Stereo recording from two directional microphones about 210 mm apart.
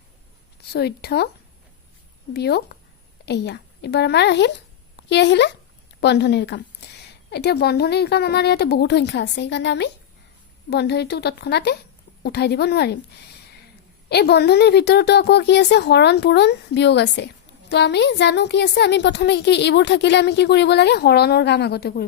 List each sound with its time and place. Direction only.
0.7 s a woman's voice: 50° left (ahead or behind)
2.3 s a woman's voice: 50° left (ahead or behind)
14.1 s a woman's voice: 50° left (ahead or behind)